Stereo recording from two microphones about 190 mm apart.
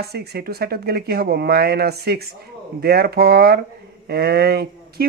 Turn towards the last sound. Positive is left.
turn(degrees=-55)  # may be behind; listen again after turning